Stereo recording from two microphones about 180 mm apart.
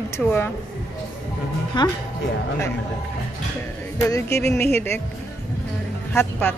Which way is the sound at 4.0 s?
15° left (ahead or behind).